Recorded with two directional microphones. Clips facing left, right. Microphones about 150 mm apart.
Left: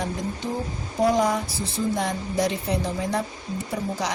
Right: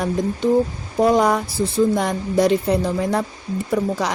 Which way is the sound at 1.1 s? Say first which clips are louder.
Right 5 dB; 65° right (ahead or behind).